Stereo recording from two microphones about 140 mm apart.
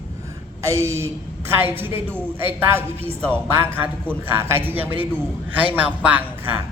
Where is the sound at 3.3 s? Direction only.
15° right (ahead or behind).